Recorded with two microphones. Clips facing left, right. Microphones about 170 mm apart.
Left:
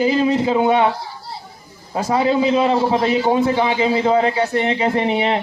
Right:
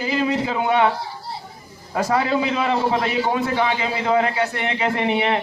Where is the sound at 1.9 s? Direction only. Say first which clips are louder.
Left 3 dB; 20° left (ahead or behind).